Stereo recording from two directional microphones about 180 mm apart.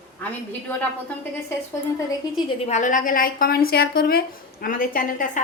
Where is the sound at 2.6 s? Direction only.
45° left (ahead or behind).